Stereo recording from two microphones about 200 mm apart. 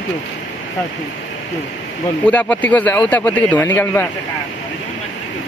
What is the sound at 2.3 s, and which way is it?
Speech, 5° left (ahead or behind).